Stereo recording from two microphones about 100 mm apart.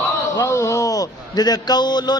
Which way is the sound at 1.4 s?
45° left (ahead or behind).